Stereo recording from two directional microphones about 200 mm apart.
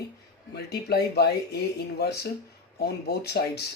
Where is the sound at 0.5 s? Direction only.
55° left (ahead or behind).